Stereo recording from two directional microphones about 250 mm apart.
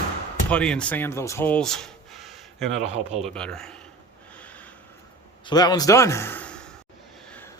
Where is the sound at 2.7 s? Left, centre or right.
Right.